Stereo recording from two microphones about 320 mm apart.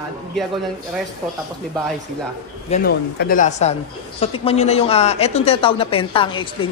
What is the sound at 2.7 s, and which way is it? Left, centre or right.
A man's voice, left.